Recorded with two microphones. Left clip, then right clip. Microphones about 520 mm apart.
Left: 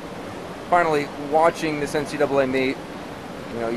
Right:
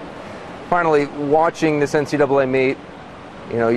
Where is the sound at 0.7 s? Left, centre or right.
Right.